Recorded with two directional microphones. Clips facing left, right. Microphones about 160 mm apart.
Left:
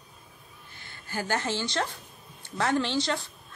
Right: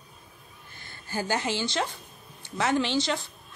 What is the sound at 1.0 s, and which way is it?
Speech, 15° right (ahead or behind).